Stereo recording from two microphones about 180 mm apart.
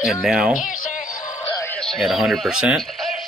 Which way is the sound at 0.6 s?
50° left (ahead or behind).